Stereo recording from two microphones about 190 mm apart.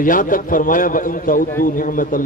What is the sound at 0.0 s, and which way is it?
A man's voice, 45° left (ahead or behind).